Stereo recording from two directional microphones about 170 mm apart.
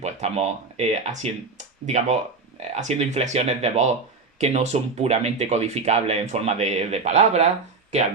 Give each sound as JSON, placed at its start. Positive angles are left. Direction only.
{"t": 0.0, "sound": "speech", "side_deg": -40}